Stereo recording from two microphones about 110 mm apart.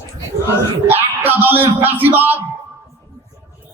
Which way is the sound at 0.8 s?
20° right (ahead or behind).